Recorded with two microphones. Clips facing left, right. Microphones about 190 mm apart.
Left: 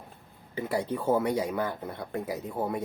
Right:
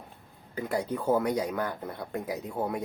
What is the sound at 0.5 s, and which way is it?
Speech, 5° left (ahead or behind).